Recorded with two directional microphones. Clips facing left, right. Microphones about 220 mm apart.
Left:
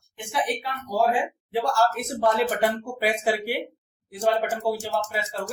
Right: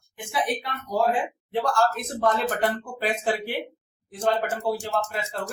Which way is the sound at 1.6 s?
10° left (ahead or behind).